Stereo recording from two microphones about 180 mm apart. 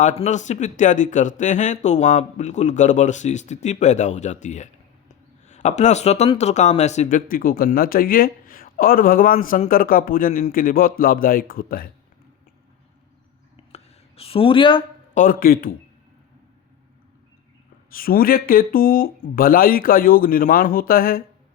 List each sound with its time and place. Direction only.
0.0 s speech: 40° left (ahead or behind)
7.2 s a man's voice: 55° left (ahead or behind)
13.7 s a sound: 35° left (ahead or behind)
15.1 s a man's voice: 50° left (ahead or behind)
17.9 s a man's voice: 55° left (ahead or behind)